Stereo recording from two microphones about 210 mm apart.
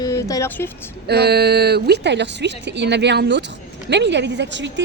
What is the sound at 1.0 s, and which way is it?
A woman's voice, 50° right (ahead or behind).